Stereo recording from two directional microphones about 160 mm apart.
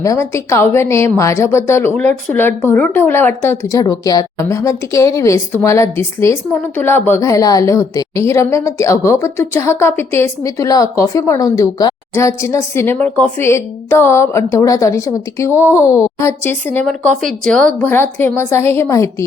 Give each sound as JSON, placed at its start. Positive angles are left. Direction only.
{"t": 0.0, "sound": "a woman's voice", "side_deg": 20}